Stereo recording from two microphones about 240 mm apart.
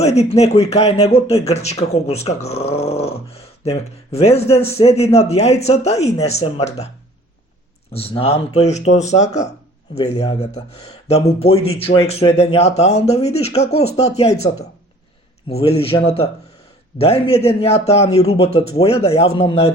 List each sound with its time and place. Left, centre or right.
0.0 s speech: left
7.9 s speech: left